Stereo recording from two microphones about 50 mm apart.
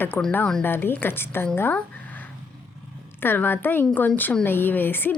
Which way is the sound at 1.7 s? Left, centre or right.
Left.